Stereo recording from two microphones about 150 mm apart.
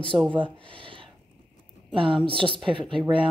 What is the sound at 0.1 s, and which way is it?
Speech, 25° right (ahead or behind).